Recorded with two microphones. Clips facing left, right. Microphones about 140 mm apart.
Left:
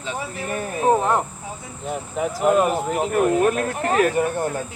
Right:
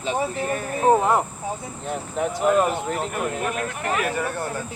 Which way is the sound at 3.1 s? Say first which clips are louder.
Left 8 dB; 45° left (ahead or behind).